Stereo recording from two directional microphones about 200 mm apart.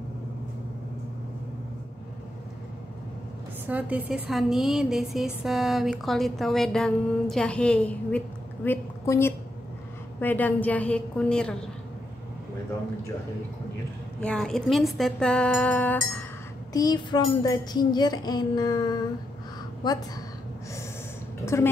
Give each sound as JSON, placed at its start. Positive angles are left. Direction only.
{"t": 3.6, "sound": "a woman's voice", "side_deg": -5}
{"t": 14.2, "sound": "a woman's voice", "side_deg": 5}
{"t": 16.7, "sound": "music", "side_deg": 20}
{"t": 21.5, "sound": "a woman's voice", "side_deg": 15}